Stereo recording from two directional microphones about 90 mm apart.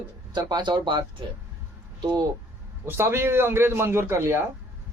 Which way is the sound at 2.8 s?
25° right (ahead or behind).